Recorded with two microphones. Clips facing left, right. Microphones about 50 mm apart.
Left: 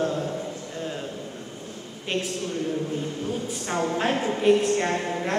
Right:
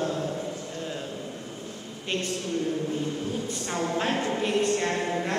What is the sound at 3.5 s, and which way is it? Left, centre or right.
Speech, centre.